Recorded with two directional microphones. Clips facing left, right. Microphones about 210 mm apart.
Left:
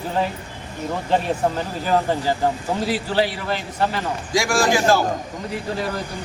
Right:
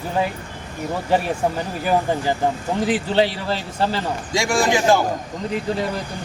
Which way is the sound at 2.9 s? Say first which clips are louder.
Right 3 dB; 20° right (ahead or behind).